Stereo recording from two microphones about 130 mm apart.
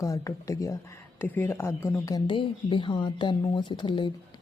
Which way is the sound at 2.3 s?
40° left (ahead or behind).